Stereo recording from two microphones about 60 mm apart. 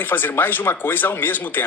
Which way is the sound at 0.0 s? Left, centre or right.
Left.